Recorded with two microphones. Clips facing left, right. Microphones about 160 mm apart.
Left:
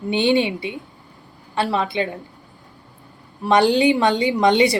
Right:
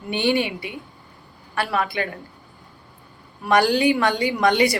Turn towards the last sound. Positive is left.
turn(degrees=25)  # may be behind; listen again after turning